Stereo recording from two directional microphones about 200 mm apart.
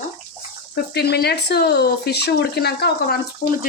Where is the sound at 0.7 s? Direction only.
55° left (ahead or behind).